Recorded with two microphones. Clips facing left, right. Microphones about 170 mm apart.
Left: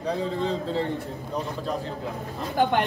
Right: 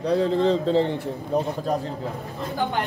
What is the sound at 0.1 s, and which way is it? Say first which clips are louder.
Speech: right 7 dB; 70° right (ahead or behind).